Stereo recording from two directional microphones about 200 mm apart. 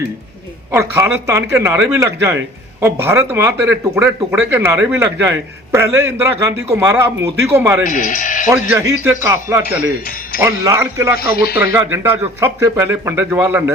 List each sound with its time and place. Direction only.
0.7 s a man's voice: 15° right (ahead or behind)
7.9 s speech: 40° left (ahead or behind)
8.7 s a man's voice: 15° right (ahead or behind)
11.2 s a man's voice: 50° left (ahead or behind)
11.5 s a man's voice: 15° right (ahead or behind)